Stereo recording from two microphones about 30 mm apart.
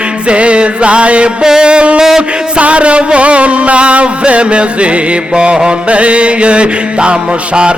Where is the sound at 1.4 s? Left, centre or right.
Right.